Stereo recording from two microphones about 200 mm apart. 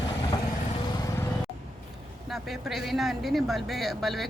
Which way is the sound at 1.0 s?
15° left (ahead or behind).